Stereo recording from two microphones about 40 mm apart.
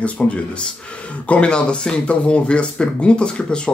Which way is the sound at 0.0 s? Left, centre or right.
Left.